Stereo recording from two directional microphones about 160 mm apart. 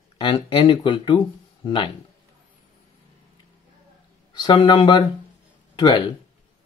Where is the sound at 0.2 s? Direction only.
30° left (ahead or behind).